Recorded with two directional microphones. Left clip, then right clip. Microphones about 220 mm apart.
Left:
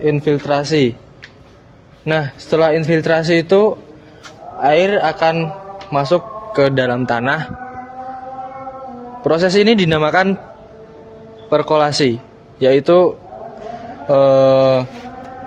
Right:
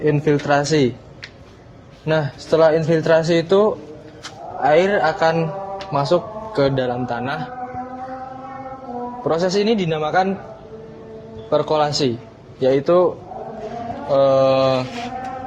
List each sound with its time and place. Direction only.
0.0 s speech: 30° left (ahead or behind)
2.0 s a man's voice: 35° left (ahead or behind)
9.2 s a man's voice: 40° left (ahead or behind)
11.4 s a man's voice: 35° left (ahead or behind)
14.1 s a man's voice: 50° left (ahead or behind)